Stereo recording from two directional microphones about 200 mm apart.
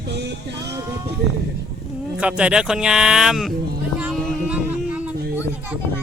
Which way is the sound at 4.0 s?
5° right (ahead or behind).